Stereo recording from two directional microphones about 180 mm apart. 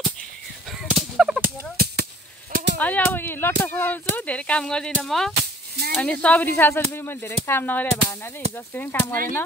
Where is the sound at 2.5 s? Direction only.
75° right (ahead or behind).